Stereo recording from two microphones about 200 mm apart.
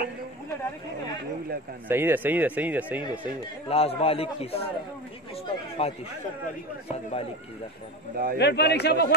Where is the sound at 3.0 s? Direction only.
25° left (ahead or behind).